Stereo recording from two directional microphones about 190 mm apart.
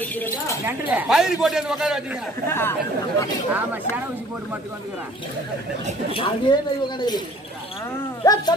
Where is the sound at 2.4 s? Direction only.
10° left (ahead or behind).